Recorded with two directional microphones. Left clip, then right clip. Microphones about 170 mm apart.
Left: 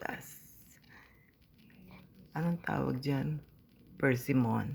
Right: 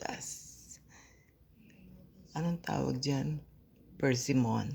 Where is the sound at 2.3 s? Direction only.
5° right (ahead or behind).